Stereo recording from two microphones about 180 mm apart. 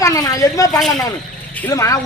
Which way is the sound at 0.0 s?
20° left (ahead or behind).